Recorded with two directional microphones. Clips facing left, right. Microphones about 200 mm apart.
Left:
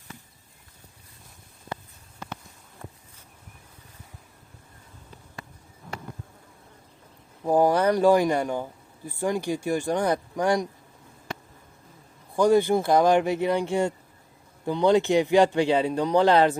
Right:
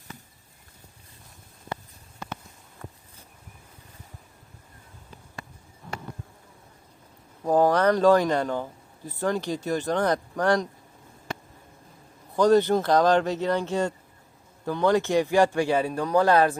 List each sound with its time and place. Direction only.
7.4 s speech: 10° left (ahead or behind)
12.4 s speech: 10° left (ahead or behind)